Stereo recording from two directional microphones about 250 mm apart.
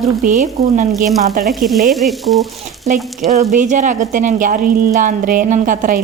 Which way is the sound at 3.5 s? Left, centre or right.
Right.